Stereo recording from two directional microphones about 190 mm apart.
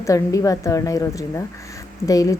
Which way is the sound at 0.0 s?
15° left (ahead or behind).